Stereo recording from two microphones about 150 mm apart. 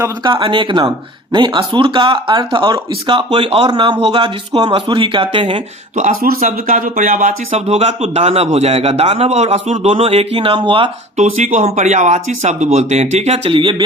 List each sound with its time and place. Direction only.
0.3 s speech: 35° right (ahead or behind)
6.4 s speech: 60° right (ahead or behind); by 10.9 s 35° right (ahead or behind)
11.3 s speech: 55° right (ahead or behind); by 13.8 s 35° right (ahead or behind)